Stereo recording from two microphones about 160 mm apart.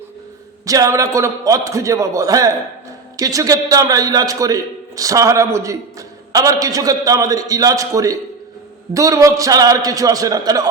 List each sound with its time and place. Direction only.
0.6 s a man's voice: 20° right (ahead or behind)